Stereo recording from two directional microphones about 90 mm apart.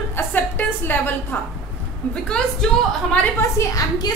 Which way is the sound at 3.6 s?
40° left (ahead or behind).